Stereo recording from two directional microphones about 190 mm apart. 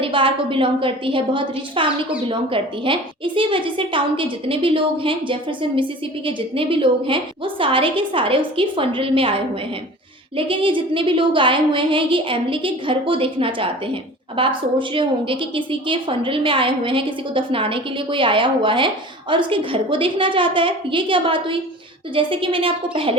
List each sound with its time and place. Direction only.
0.0 s a woman's voice: 25° right (ahead or behind)